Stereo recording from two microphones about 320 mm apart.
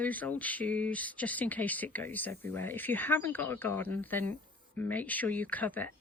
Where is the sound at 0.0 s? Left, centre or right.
Centre.